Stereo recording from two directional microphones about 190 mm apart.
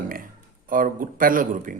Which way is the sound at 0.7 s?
45° right (ahead or behind).